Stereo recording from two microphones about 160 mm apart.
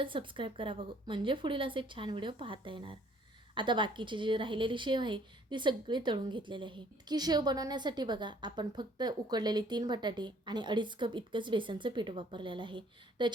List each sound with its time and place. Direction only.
0.0 s a woman's voice: 30° right (ahead or behind)